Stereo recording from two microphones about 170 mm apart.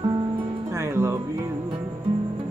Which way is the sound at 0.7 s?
15° right (ahead or behind).